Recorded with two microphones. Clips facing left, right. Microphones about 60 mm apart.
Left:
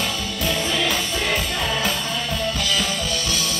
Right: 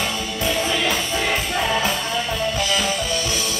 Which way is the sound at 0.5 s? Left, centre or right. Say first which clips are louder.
Right 2 dB; centre.